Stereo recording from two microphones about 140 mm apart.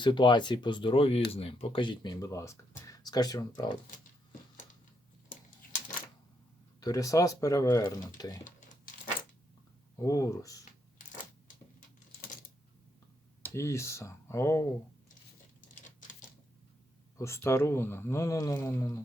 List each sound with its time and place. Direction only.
0.0 s speech: 35° left (ahead or behind)
6.7 s speech: 25° left (ahead or behind)
10.0 s speech: 25° left (ahead or behind)
11.0 s a sound: 60° left (ahead or behind)
13.4 s speech: 20° left (ahead or behind)
17.2 s speech: 20° left (ahead or behind)